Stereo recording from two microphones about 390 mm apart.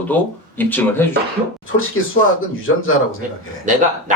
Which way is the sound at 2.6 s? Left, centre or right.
Left.